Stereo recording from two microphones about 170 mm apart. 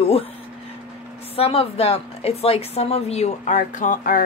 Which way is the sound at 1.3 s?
35° left (ahead or behind).